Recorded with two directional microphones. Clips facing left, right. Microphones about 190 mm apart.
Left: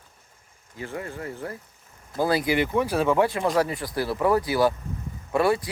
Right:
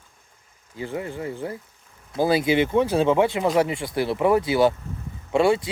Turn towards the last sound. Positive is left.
turn(degrees=-25)  # may be behind; listen again after turning